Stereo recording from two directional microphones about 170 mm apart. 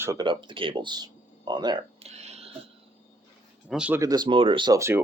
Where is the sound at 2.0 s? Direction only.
40° right (ahead or behind).